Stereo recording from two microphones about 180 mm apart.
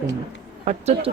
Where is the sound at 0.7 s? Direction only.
35° right (ahead or behind).